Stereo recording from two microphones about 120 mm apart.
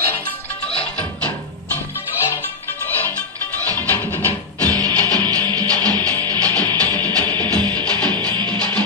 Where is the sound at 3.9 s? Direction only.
15° left (ahead or behind).